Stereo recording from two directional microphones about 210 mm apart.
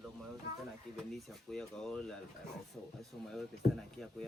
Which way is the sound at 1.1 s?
Centre (ahead or behind).